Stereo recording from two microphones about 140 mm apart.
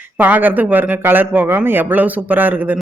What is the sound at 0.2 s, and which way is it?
A man's voice, 10° right (ahead or behind).